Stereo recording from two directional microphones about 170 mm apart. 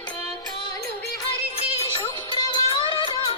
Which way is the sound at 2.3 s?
30° left (ahead or behind).